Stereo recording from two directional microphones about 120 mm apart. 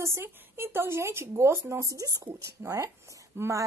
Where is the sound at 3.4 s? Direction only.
20° right (ahead or behind).